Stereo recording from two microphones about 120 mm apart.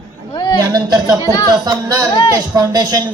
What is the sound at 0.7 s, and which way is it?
Speech, 30° right (ahead or behind).